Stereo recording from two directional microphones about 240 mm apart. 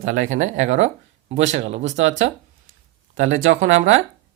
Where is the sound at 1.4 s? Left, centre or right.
Right.